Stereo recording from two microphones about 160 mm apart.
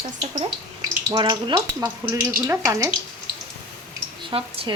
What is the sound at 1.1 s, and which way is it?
Speech, 25° right (ahead or behind).